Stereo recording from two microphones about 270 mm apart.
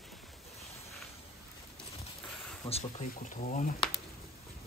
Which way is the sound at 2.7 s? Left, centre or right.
Left.